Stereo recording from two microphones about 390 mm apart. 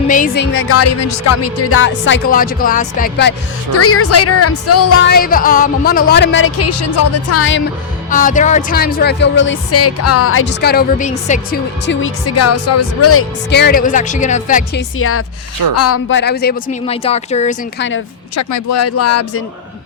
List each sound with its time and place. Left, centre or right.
0.1 s speech: left
3.8 s a woman's voice: left
5.1 s speech: left
8.1 s speech: centre
18.3 s a woman's voice: left